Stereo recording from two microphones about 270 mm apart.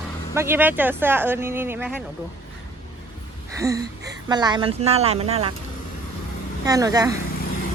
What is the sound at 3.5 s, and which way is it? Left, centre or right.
Gasp, centre.